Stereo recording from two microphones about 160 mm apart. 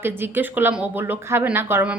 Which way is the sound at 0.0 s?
10° right (ahead or behind).